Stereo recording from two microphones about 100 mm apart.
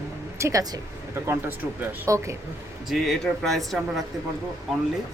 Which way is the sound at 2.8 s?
Centre (ahead or behind).